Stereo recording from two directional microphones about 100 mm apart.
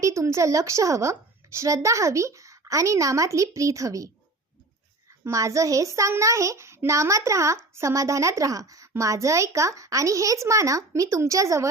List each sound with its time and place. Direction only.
0.0 s a child's voice: 30° right (ahead or behind)
5.2 s a child's voice: 30° right (ahead or behind)